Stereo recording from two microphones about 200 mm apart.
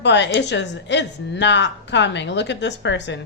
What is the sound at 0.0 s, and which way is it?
A woman's voice, 60° left (ahead or behind).